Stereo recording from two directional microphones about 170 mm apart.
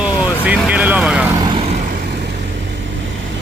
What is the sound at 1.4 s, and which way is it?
Vehicle, 25° right (ahead or behind).